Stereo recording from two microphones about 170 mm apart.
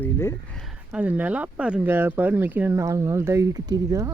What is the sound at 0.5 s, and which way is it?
Speech, centre (ahead or behind).